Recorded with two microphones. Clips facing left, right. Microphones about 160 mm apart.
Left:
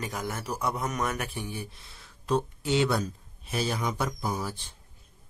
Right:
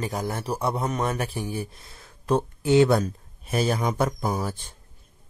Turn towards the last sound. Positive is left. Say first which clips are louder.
# right 4 dB
turn(degrees=-50)  # may be behind; listen again after turning